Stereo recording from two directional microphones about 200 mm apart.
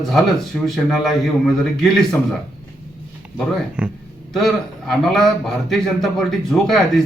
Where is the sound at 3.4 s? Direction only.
5° right (ahead or behind).